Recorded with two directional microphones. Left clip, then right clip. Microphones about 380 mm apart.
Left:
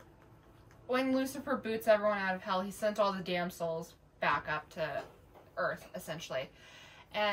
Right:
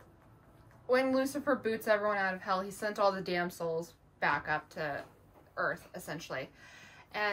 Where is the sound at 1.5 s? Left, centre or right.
Centre.